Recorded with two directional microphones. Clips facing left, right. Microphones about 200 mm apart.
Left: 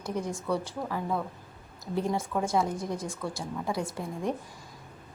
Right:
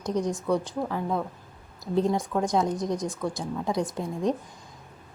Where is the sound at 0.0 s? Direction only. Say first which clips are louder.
Right 5 dB; 20° right (ahead or behind).